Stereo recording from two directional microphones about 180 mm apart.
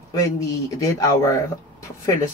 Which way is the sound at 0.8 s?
15° left (ahead or behind).